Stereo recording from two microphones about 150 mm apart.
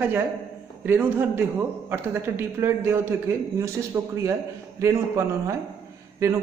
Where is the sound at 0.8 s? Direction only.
15° right (ahead or behind).